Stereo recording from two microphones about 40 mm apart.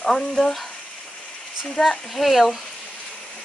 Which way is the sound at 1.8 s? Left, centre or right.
Centre.